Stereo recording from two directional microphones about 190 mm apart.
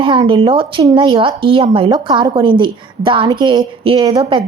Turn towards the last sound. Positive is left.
turn(degrees=-25)  # may be behind; listen again after turning